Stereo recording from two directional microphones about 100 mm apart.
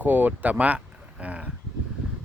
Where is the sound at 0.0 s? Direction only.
15° right (ahead or behind).